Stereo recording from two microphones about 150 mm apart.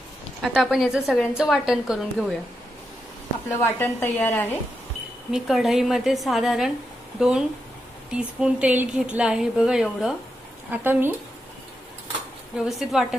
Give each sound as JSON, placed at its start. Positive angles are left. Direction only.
{"t": 0.4, "sound": "a woman's voice", "side_deg": -5}
{"t": 3.7, "sound": "a woman's voice", "side_deg": 15}
{"t": 5.3, "sound": "a woman's voice", "side_deg": 0}
{"t": 12.5, "sound": "a woman's voice", "side_deg": 0}